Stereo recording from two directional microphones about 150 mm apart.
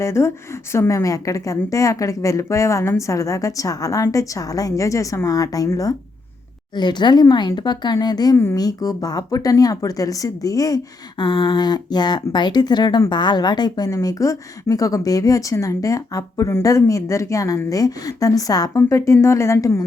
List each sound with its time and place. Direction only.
0.0 s speech: 20° left (ahead or behind)